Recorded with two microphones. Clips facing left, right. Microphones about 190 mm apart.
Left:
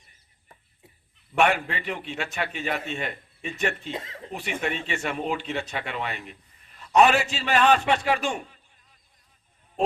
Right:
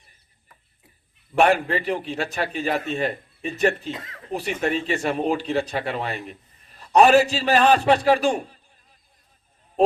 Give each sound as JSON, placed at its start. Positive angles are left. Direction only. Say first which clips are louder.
{"t": 1.4, "sound": "speech", "louder": "right 4 dB", "side_deg": -35}
{"t": 3.9, "sound": "speech", "louder": "left 3 dB", "side_deg": 25}
{"t": 4.3, "sound": "speech", "louder": "right 6 dB", "side_deg": -35}